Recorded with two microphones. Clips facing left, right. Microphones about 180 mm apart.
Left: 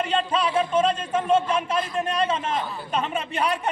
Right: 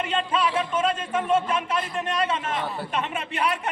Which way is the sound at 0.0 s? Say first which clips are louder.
Left 1 dB; 35° left (ahead or behind).